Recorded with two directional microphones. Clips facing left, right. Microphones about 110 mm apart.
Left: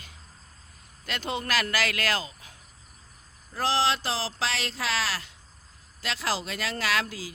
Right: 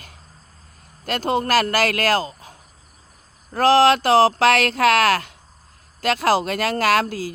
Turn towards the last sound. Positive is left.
turn(degrees=-45)  # may be behind; listen again after turning